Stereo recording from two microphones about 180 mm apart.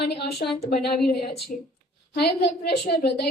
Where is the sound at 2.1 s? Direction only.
65° left (ahead or behind).